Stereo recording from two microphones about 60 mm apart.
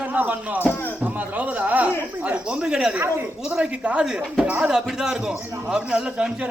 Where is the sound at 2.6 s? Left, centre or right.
Centre.